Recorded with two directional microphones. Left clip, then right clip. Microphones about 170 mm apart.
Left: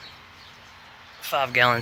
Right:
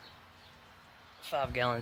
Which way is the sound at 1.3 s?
10° right (ahead or behind).